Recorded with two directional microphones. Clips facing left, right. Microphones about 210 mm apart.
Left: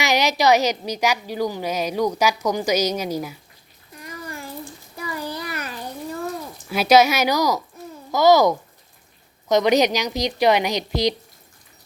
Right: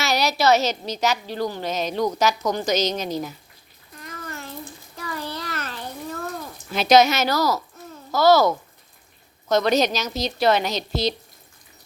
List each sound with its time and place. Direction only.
0.0 s speech: 15° left (ahead or behind)
3.9 s a sound: 10° left (ahead or behind)
6.7 s speech: 10° left (ahead or behind)